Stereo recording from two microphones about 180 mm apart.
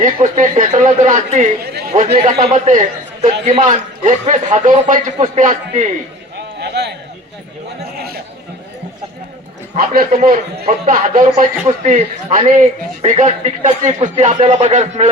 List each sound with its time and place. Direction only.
0.3 s a man's voice: 45° right (ahead or behind)
6.6 s a sound: 65° right (ahead or behind)
9.7 s a man's voice: 55° right (ahead or behind)